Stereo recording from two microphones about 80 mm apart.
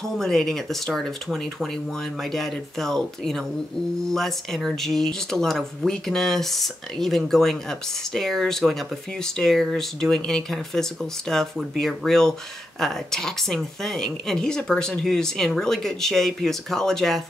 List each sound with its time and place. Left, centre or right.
0.2 s speech: centre